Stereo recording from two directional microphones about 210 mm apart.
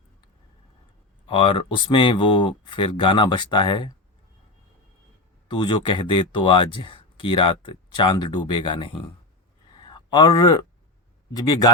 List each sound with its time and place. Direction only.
1.3 s speech: 25° left (ahead or behind)
5.5 s speech: 25° left (ahead or behind)
9.7 s a sound: 20° left (ahead or behind)
11.3 s speech: 15° left (ahead or behind)